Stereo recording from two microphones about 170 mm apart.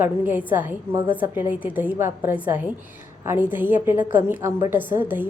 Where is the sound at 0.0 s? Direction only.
10° right (ahead or behind).